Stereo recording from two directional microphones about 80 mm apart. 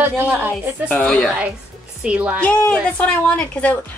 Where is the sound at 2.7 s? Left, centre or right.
Centre.